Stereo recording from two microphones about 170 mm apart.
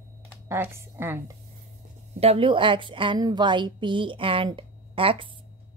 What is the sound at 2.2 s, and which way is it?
A woman's voice, 35° right (ahead or behind).